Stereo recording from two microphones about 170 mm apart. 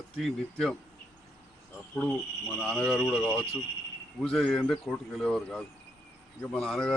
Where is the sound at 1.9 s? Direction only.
10° left (ahead or behind).